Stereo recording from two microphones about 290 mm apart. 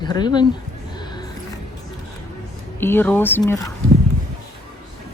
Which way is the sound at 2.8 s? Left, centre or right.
Centre.